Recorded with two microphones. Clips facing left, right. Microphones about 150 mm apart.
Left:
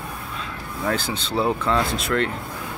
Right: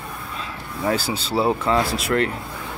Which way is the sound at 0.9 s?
5° right (ahead or behind).